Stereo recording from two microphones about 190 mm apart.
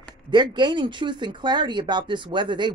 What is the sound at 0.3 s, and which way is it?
Speech, 25° right (ahead or behind).